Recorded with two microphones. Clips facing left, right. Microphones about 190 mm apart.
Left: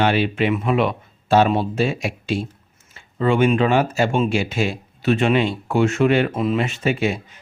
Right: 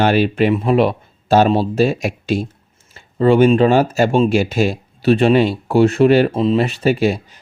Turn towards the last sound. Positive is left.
turn(degrees=-35)  # may be behind; listen again after turning